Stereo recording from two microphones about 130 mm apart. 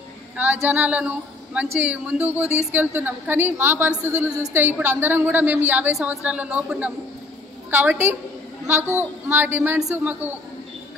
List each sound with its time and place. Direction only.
0.4 s a woman's voice: 15° right (ahead or behind)